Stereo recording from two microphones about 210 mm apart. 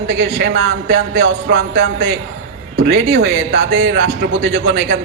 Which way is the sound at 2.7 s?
65° right (ahead or behind).